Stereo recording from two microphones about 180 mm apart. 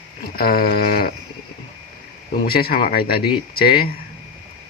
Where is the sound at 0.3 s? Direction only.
55° left (ahead or behind).